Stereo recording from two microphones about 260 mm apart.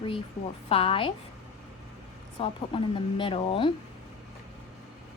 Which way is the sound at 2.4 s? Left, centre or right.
Centre.